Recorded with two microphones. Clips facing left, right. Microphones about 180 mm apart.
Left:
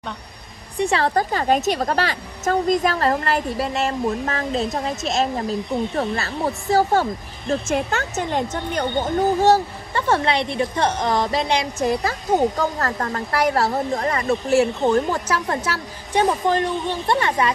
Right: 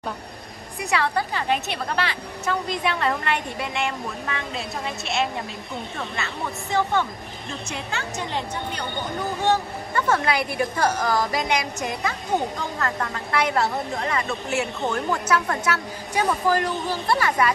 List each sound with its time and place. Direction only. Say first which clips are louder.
0.7 s a woman's voice: left 5 dB; 35° left (ahead or behind)